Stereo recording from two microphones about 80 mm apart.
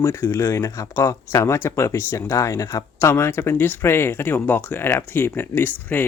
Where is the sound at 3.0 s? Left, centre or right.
Left.